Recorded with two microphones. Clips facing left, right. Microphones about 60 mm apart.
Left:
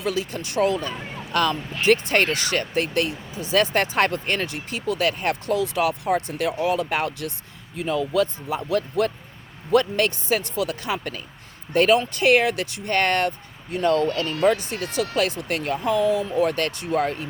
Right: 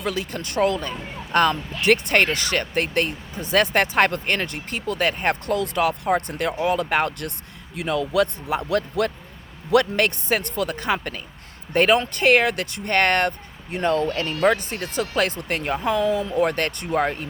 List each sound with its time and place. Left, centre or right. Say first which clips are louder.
0.0 s speech: left 1 dB; right
1.8 s speech: right 1 dB; right
5.5 s speech: left 2 dB; right
7.8 s speech: right 1 dB; right
13.7 s speech: left 1 dB; right
14.4 s speech: even; right
15.7 s speech: left 1 dB; right